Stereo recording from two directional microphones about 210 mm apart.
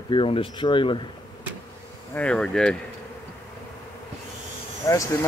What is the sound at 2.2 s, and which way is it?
Speech, 5° left (ahead or behind).